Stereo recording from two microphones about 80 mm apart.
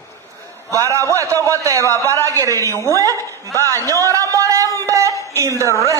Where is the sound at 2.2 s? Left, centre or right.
Right.